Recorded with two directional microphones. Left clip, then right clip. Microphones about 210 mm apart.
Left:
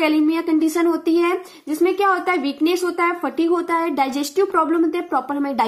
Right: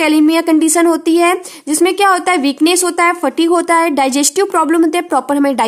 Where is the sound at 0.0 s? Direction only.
35° right (ahead or behind).